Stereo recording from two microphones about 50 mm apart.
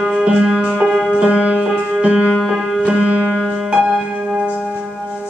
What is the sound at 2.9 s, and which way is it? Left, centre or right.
Music, centre.